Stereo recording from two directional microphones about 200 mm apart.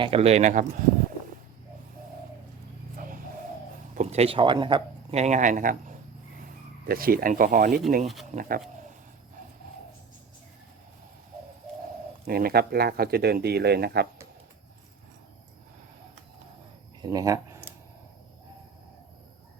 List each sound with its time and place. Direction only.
0.0 s speech: 30° right (ahead or behind)
3.9 s speech: 35° right (ahead or behind)
8.0 s speech: centre (ahead or behind)
8.3 s speech: 45° right (ahead or behind)
12.2 s speech: 50° right (ahead or behind)
17.0 s a sound: 20° right (ahead or behind)